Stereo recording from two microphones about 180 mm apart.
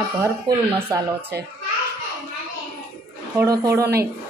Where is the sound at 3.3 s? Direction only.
20° right (ahead or behind).